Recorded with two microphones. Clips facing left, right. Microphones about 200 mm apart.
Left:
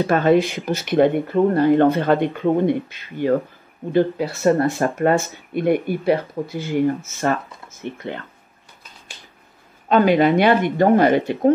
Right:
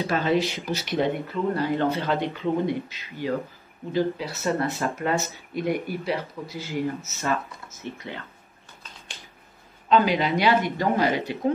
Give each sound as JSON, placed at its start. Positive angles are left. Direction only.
{"t": 0.0, "sound": "speech", "side_deg": 55}
{"t": 9.8, "sound": "speech", "side_deg": 55}